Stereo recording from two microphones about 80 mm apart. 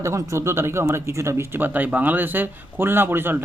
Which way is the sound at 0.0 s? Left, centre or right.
Right.